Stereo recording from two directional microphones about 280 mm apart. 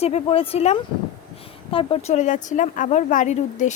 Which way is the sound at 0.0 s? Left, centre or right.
Left.